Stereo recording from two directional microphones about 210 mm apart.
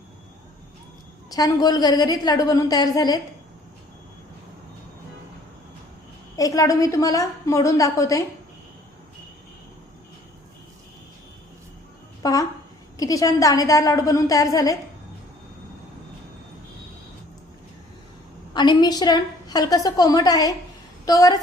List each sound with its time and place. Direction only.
1.3 s a woman's voice: 15° left (ahead or behind)
6.3 s a woman's voice: 15° left (ahead or behind)
12.2 s a woman's voice: 15° left (ahead or behind)
18.5 s a woman's voice: 20° left (ahead or behind)